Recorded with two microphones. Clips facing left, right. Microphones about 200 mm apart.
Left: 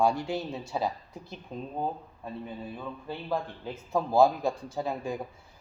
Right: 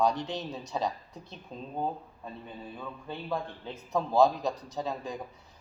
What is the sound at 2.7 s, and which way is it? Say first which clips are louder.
A man's voice: left 2 dB; 5° left (ahead or behind).